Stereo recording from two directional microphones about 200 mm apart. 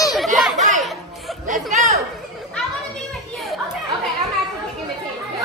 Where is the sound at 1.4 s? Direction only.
40° right (ahead or behind).